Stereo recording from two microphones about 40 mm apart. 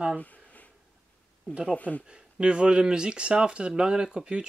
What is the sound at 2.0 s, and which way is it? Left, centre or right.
Speech, right.